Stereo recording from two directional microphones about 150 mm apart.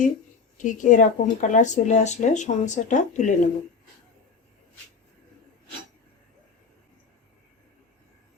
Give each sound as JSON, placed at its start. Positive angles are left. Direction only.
{"t": 0.5, "sound": "speech", "side_deg": 60}